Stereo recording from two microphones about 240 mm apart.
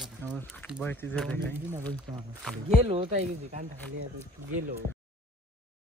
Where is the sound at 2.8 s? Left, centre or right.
Right.